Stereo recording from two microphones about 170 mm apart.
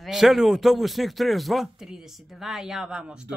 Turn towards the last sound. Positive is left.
turn(degrees=-5)  # may be behind; listen again after turning